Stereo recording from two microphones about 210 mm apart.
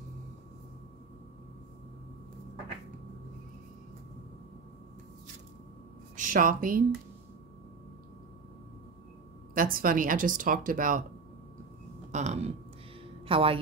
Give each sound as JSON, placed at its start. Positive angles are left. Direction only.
{"t": 6.1, "sound": "a woman's voice", "side_deg": -40}
{"t": 9.5, "sound": "speech", "side_deg": -40}
{"t": 12.1, "sound": "a sound", "side_deg": -35}
{"t": 13.3, "sound": "a woman's voice", "side_deg": -25}